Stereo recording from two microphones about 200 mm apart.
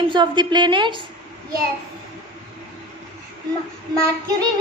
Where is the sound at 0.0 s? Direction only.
25° right (ahead or behind).